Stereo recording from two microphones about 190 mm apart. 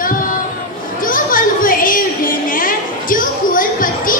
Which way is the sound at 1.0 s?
45° left (ahead or behind).